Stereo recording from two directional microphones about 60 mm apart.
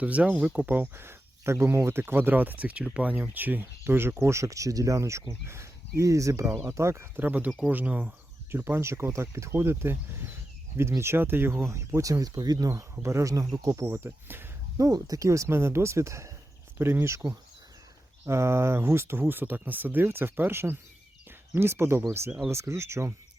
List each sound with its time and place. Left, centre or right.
0.0 s speech: right
6.6 s speech: right
7.2 s speech: right
8.4 s speech: right
11.9 s speech: right
13.3 s speech: right
13.8 s speech: right
14.8 s speech: right
15.4 s speech: right
16.7 s speech: right
18.3 s speech: right